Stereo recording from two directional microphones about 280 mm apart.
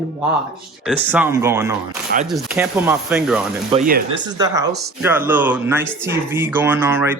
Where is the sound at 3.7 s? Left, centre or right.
Right.